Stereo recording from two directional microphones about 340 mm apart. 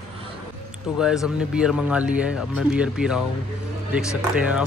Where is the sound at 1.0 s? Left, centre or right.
Centre.